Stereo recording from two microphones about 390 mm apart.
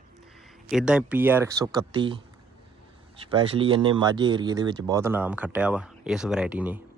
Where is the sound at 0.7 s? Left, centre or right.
Centre.